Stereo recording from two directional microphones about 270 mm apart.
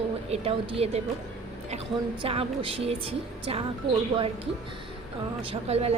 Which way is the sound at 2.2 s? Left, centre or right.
Centre.